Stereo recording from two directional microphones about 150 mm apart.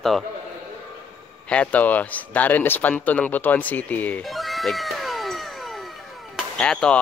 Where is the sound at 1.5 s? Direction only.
10° left (ahead or behind).